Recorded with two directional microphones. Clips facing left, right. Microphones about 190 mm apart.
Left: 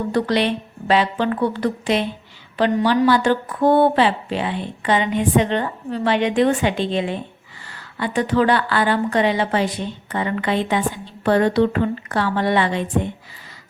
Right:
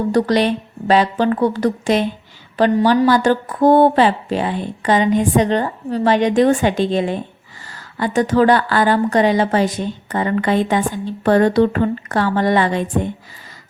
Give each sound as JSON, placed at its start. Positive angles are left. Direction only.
{"t": 0.1, "sound": "a woman's voice", "side_deg": -40}